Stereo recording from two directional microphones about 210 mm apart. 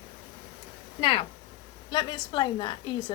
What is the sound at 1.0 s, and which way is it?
A woman's voice, 25° left (ahead or behind).